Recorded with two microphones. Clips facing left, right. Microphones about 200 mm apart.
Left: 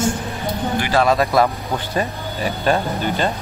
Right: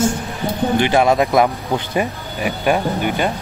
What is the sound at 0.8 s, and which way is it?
Speech, 20° right (ahead or behind).